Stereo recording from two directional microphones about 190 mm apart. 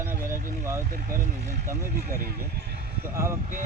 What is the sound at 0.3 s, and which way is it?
Vehicle, 45° right (ahead or behind).